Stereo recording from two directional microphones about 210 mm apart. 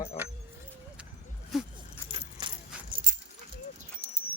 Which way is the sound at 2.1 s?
20° right (ahead or behind).